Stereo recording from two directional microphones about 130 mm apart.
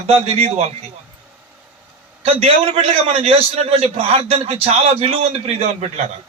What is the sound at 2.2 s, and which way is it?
A man's voice, 50° right (ahead or behind).